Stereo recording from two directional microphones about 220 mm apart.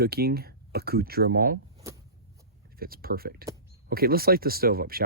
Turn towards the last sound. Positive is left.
turn(degrees=-45)  # may be behind; listen again after turning